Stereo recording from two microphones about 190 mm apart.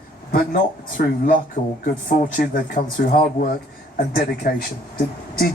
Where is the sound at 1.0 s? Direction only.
50° left (ahead or behind).